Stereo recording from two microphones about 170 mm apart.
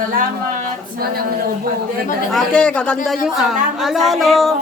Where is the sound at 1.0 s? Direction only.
60° right (ahead or behind).